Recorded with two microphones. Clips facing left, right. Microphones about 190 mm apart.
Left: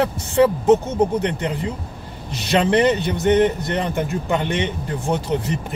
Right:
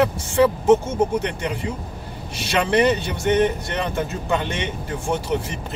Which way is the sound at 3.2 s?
15° right (ahead or behind).